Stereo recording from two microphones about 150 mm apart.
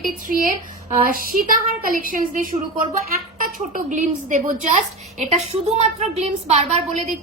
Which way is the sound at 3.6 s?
60° right (ahead or behind).